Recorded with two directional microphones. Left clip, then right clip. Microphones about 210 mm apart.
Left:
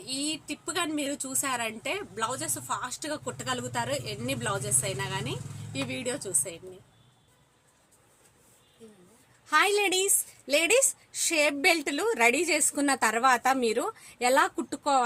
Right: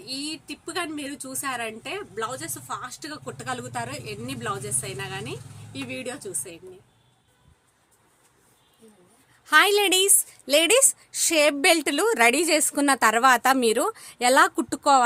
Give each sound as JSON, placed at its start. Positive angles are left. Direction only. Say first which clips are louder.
{"t": 0.0, "sound": "a woman's voice", "louder": "even", "side_deg": 0}
{"t": 9.5, "sound": "a woman's voice", "louder": "right 6 dB", "side_deg": -40}